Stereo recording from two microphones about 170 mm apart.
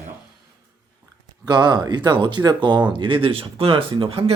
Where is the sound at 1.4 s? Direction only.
25° right (ahead or behind).